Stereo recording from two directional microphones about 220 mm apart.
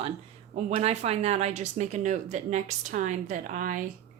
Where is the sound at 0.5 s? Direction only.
30° right (ahead or behind).